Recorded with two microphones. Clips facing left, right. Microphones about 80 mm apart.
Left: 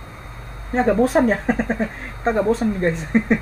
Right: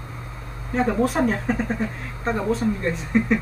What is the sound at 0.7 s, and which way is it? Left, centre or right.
Speech, left.